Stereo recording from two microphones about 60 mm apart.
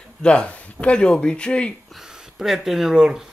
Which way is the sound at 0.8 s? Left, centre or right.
Centre.